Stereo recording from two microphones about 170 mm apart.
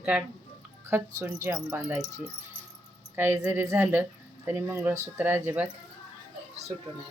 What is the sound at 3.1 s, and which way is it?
Speech, 10° right (ahead or behind).